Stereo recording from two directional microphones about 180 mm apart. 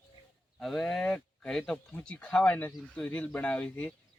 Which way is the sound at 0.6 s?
5° left (ahead or behind).